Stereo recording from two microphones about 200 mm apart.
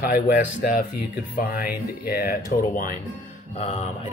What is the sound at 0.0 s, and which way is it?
Speech, 45° left (ahead or behind).